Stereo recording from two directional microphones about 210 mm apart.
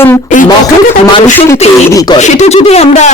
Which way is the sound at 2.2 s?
30° left (ahead or behind).